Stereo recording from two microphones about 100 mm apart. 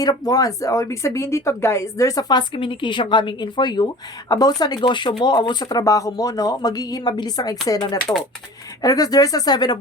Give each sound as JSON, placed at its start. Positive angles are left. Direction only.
{"t": 0.0, "sound": "speech", "side_deg": 40}